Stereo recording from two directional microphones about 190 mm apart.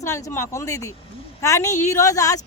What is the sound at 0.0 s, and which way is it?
Speech, 15° left (ahead or behind).